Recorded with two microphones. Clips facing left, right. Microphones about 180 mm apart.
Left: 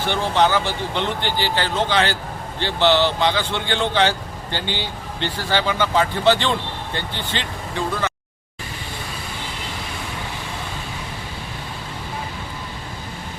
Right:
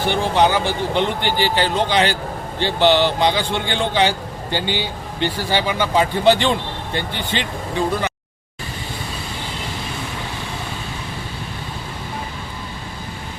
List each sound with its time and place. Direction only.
0.0 s a man's voice: 15° right (ahead or behind)